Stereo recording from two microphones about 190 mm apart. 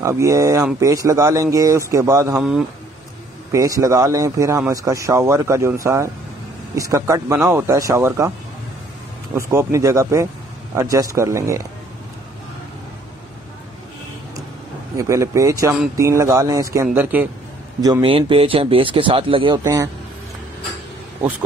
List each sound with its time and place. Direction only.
0.0 s speech: 15° right (ahead or behind)
3.5 s speech: 20° right (ahead or behind)
9.3 s speech: 15° right (ahead or behind)
15.0 s speech: 15° right (ahead or behind)
17.7 s speech: 20° right (ahead or behind)
19.6 s speech: 15° right (ahead or behind)